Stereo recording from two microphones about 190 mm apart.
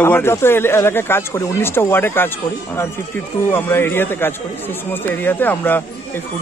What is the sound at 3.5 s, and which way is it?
Speech, 10° left (ahead or behind).